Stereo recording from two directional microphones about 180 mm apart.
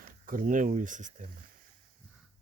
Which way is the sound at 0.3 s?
50° right (ahead or behind).